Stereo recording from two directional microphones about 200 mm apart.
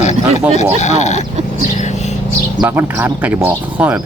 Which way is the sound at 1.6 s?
40° left (ahead or behind).